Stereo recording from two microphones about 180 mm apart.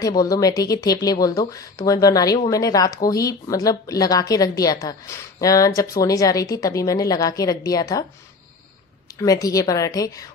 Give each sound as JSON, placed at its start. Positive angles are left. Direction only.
{"t": 0.0, "sound": "speech", "side_deg": 20}
{"t": 9.2, "sound": "speech", "side_deg": 20}